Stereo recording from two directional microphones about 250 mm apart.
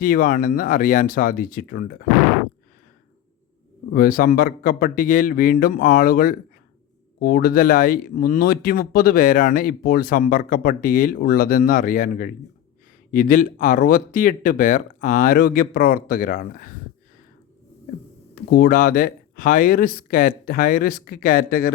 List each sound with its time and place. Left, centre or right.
0.0 s speech: left
3.9 s speech: left
18.5 s speech: left